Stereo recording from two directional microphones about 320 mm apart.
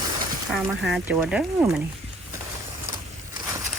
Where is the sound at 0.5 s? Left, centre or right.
Centre.